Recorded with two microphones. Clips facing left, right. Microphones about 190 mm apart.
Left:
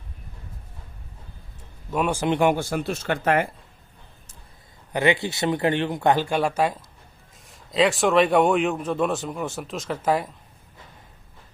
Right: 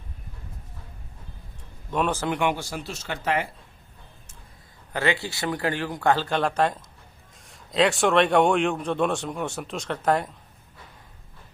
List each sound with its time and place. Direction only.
1.9 s speech: 10° left (ahead or behind)
2.4 s speech: 50° left (ahead or behind)
4.9 s speech: 15° left (ahead or behind)